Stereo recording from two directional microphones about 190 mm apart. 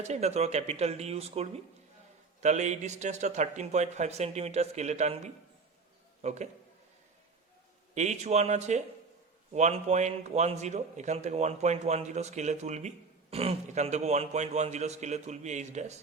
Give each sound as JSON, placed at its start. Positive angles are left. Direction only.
{"t": 0.0, "sound": "a man's voice", "side_deg": -35}
{"t": 7.9, "sound": "a man's voice", "side_deg": -35}